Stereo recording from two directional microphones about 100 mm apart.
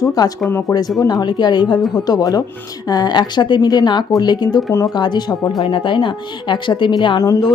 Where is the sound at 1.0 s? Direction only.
40° left (ahead or behind).